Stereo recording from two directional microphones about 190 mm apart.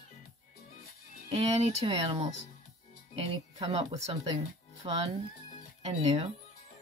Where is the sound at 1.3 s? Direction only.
30° right (ahead or behind).